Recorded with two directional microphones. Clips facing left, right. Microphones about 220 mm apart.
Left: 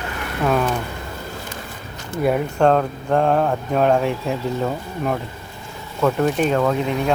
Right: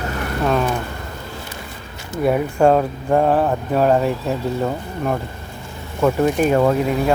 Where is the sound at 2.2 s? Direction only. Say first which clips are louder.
Right 2 dB; centre (ahead or behind).